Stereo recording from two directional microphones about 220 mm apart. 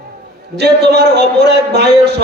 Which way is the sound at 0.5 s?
50° right (ahead or behind).